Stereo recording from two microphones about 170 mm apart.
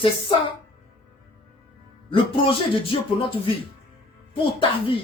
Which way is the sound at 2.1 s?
30° left (ahead or behind).